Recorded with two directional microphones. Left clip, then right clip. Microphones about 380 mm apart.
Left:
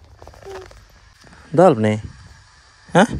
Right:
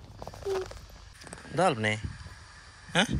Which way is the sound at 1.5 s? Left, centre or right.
Left.